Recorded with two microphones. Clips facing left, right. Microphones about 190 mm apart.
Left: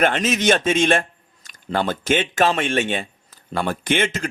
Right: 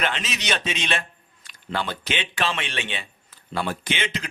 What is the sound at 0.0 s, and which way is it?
A man's voice, 50° left (ahead or behind).